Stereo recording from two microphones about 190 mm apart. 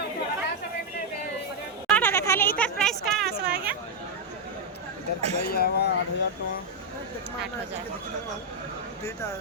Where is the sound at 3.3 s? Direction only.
55° right (ahead or behind).